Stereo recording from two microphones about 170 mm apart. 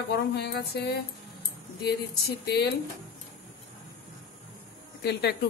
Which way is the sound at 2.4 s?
75° left (ahead or behind).